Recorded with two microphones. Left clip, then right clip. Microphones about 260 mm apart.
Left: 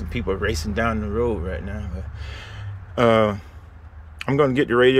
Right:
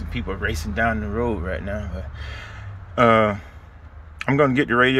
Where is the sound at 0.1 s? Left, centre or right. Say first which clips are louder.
Left 3 dB; centre.